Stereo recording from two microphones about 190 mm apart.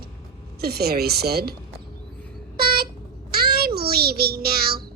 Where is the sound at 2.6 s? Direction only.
55° right (ahead or behind).